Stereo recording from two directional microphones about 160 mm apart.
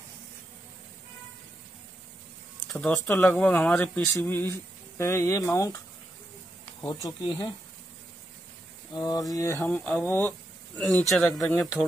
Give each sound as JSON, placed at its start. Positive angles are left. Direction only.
{"t": 2.7, "sound": "speech", "side_deg": 5}
{"t": 6.8, "sound": "speech", "side_deg": 25}
{"t": 8.9, "sound": "speech", "side_deg": 25}